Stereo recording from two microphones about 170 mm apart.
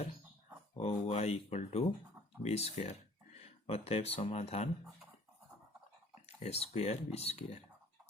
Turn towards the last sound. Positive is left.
turn(degrees=35)  # may be behind; listen again after turning